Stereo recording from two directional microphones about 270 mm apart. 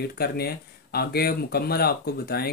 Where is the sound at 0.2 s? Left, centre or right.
Left.